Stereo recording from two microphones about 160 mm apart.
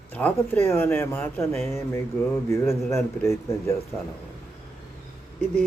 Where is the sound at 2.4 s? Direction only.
15° left (ahead or behind).